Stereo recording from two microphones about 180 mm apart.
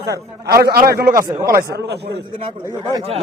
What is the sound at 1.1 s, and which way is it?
Speech, 15° right (ahead or behind).